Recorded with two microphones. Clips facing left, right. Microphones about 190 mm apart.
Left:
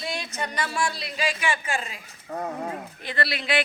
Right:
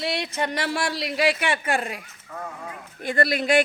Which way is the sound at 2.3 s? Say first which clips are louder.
Left 6 dB; 40° left (ahead or behind).